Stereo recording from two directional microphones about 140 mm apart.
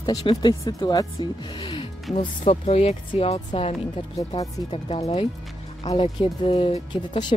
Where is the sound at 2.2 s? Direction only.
50° left (ahead or behind).